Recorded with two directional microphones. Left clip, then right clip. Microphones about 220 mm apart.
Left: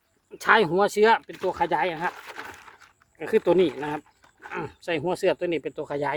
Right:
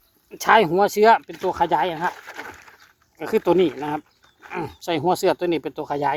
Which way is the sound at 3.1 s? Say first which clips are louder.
Right 2 dB; 10° right (ahead or behind).